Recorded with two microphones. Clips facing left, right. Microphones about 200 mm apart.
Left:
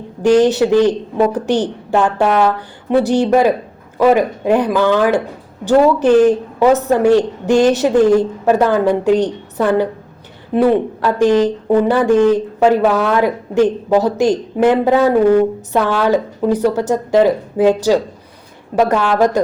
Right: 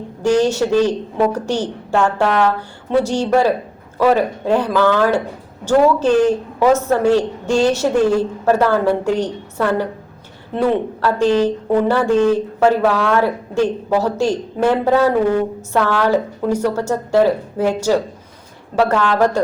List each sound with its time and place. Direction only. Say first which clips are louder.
0.3 s a man's voice: left 3 dB; 15° left (ahead or behind)